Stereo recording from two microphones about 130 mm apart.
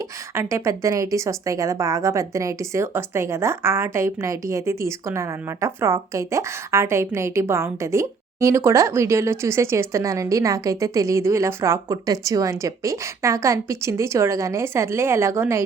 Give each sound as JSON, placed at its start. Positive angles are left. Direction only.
{"t": 0.3, "sound": "speech", "side_deg": -20}